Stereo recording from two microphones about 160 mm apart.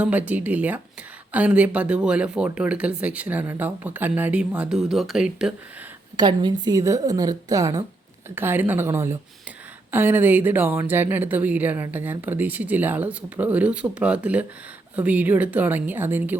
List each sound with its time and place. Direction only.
0.0 s speech: 10° right (ahead or behind)
6.1 s a woman's voice: 25° right (ahead or behind)